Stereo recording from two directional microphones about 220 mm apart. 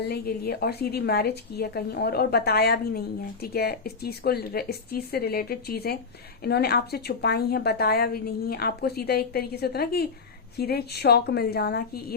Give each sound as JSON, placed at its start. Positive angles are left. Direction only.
{"t": 0.0, "sound": "a woman's voice", "side_deg": 45}